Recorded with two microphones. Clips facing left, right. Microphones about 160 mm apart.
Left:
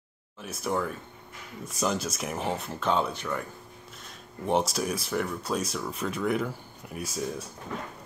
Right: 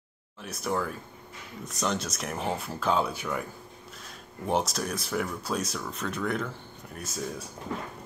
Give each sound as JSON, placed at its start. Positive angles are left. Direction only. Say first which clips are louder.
{"t": 0.4, "sound": "speech", "louder": "left 1 dB", "side_deg": 0}